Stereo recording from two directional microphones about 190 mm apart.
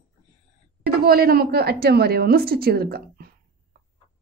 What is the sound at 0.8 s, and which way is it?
A woman's voice, 55° right (ahead or behind).